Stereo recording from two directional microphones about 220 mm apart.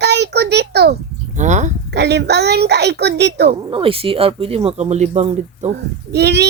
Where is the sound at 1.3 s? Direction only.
35° right (ahead or behind).